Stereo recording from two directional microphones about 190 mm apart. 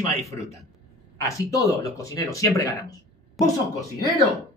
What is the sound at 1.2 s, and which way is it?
Speech, 15° left (ahead or behind).